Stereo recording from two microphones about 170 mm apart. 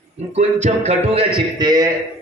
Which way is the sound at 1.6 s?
25° right (ahead or behind).